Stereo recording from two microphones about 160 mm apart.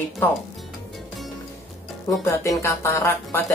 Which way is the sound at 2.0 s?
20° left (ahead or behind).